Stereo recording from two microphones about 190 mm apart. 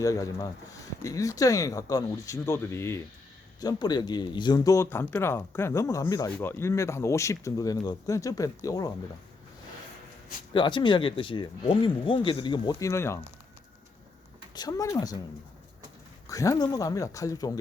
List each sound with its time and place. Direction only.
0.0 s speech: 15° left (ahead or behind)
10.5 s speech: 25° left (ahead or behind)
14.5 s speech: 20° left (ahead or behind)
16.3 s speech: 15° left (ahead or behind)